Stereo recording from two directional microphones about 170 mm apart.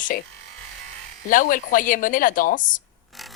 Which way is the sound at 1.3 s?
50° left (ahead or behind).